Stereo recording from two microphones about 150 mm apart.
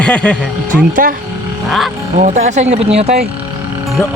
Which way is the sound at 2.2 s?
50° right (ahead or behind).